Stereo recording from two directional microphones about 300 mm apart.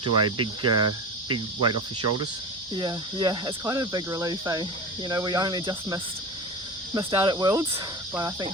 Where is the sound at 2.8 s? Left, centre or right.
Centre.